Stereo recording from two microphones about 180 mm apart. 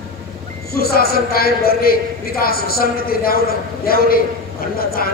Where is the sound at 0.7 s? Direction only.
60° left (ahead or behind).